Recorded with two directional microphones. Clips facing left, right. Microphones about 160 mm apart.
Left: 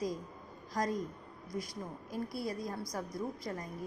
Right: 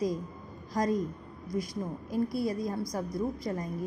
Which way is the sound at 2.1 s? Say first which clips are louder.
Right 8 dB; 20° right (ahead or behind).